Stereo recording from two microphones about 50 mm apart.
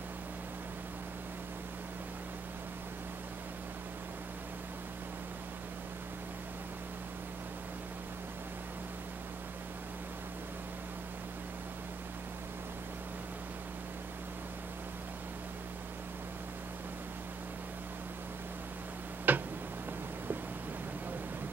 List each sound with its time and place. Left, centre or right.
19.3 s tick-tock: right